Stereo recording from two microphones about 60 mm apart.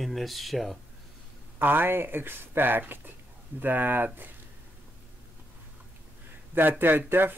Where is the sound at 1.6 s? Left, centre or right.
Right.